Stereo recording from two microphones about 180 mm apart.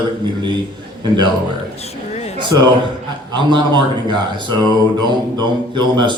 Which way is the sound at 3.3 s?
25° right (ahead or behind).